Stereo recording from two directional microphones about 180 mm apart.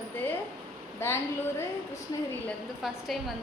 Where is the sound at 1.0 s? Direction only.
15° left (ahead or behind).